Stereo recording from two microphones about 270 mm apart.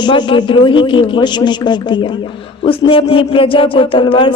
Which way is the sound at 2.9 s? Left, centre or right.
Centre.